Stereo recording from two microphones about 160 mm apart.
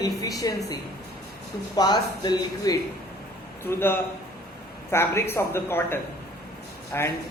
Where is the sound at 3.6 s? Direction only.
15° left (ahead or behind).